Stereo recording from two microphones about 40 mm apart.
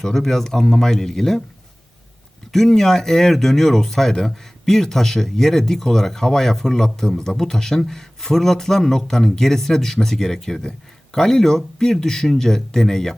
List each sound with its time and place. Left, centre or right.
0.0 s a man's voice: centre
2.5 s a man's voice: centre